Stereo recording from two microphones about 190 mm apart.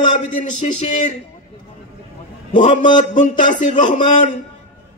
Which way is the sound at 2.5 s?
40° left (ahead or behind).